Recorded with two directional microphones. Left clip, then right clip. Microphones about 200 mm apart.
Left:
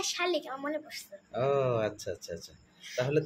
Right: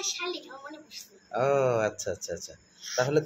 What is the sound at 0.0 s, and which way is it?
Speech, 55° left (ahead or behind).